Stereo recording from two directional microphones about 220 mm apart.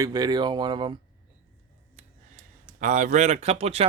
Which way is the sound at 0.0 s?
15° right (ahead or behind).